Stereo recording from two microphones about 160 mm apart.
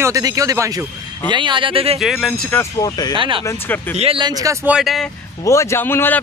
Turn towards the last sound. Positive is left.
turn(degrees=15)  # may be behind; listen again after turning